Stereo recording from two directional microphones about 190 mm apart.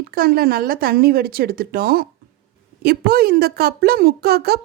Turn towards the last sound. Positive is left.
turn(degrees=-55)  # may be behind; listen again after turning